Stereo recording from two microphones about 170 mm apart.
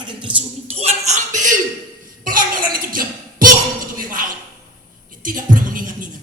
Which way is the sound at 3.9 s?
55° right (ahead or behind).